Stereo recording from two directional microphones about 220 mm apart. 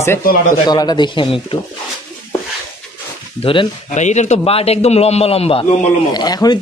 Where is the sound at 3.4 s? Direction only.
25° left (ahead or behind).